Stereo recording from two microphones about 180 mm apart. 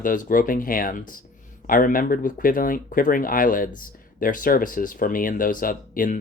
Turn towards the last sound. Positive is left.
turn(degrees=50)  # may be behind; listen again after turning